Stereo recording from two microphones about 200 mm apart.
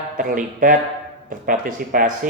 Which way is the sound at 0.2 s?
45° right (ahead or behind).